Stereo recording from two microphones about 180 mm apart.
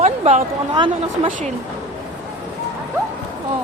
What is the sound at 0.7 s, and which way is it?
Speech, 25° right (ahead or behind).